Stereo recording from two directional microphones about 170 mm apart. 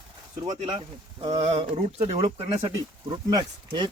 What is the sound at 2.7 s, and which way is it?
Speech, 20° right (ahead or behind).